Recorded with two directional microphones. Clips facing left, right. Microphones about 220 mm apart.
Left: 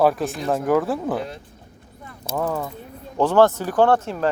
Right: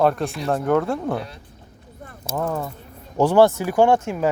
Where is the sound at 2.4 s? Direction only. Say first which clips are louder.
Even; centre (ahead or behind).